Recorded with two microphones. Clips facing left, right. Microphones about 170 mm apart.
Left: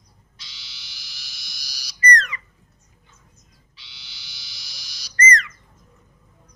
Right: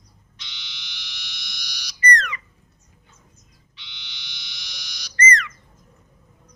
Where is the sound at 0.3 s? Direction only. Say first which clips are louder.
Right 4 dB; 35° left (ahead or behind).